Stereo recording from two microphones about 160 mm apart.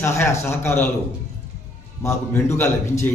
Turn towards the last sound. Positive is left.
turn(degrees=15)  # may be behind; listen again after turning